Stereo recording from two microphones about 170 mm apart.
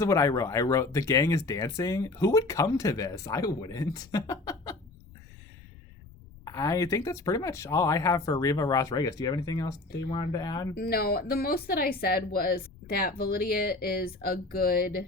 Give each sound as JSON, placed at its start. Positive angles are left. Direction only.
{"t": 0.0, "sound": "speech", "side_deg": 20}
{"t": 6.4, "sound": "speech", "side_deg": 20}
{"t": 10.8, "sound": "speech", "side_deg": 65}